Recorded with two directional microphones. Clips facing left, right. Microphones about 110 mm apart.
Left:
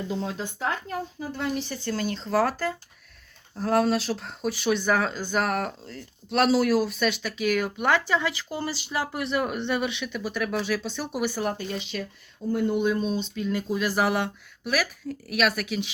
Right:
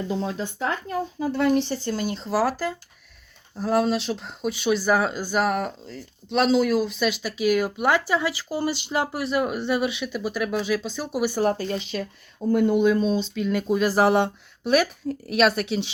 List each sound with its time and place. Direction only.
1.3 s speech: 65° right (ahead or behind)
1.8 s speech: 15° right (ahead or behind)
9.1 s speech: 5° right (ahead or behind)
11.3 s speech: 35° right (ahead or behind)
12.4 s speech: 75° right (ahead or behind)
13.8 s a woman's voice: 35° right (ahead or behind)